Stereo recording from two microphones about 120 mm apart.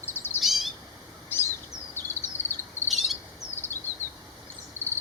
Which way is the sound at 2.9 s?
Centre (ahead or behind).